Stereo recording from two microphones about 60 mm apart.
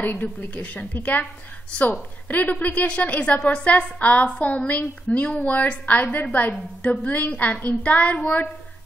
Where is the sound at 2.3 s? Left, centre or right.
Left.